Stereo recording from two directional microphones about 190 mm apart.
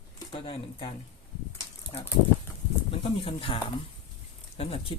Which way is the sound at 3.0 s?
30° left (ahead or behind).